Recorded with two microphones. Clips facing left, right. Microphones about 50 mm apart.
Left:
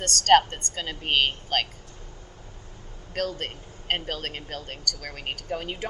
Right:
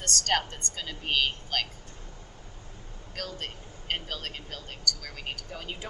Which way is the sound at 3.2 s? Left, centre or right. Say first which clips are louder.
Left 8 dB; left.